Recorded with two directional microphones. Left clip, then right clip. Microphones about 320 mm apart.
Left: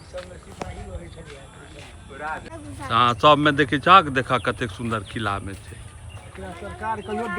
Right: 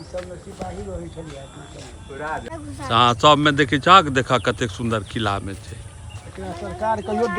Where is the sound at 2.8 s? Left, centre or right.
Centre.